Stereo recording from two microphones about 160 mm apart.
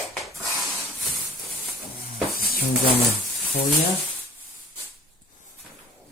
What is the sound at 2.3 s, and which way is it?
Music, 65° left (ahead or behind).